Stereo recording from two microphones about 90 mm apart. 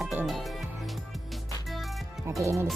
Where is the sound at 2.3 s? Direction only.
35° right (ahead or behind).